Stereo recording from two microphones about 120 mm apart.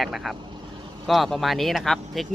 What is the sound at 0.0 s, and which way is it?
Speech, centre (ahead or behind).